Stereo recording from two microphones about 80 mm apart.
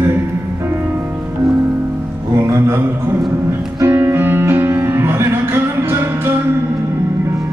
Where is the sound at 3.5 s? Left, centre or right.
Right.